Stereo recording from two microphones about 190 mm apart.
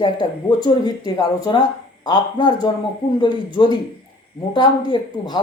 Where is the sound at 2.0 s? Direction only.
25° left (ahead or behind).